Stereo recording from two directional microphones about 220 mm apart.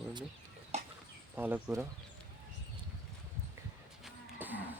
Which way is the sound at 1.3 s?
10° right (ahead or behind).